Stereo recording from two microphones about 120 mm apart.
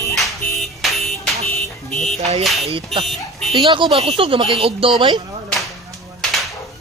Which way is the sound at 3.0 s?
Centre (ahead or behind).